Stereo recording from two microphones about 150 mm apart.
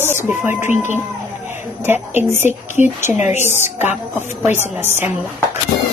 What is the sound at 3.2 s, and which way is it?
Speech, 50° left (ahead or behind).